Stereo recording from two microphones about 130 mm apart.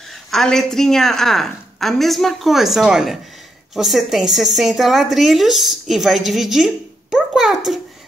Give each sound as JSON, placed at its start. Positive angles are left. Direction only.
{"t": 0.3, "sound": "a woman's voice", "side_deg": 0}